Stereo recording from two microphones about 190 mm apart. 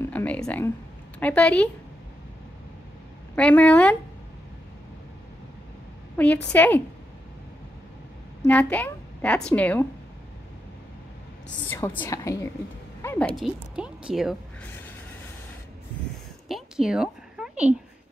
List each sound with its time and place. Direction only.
0.0 s a woman's voice: 10° left (ahead or behind)
3.3 s a woman's voice: 5° left (ahead or behind)
6.1 s a woman's voice: 10° left (ahead or behind)
8.5 s a woman's voice: 10° left (ahead or behind)
11.4 s a woman's voice: 10° left (ahead or behind)
13.0 s a sound: 15° left (ahead or behind)
13.4 s speech: 5° right (ahead or behind)
16.4 s a sound: centre (ahead or behind)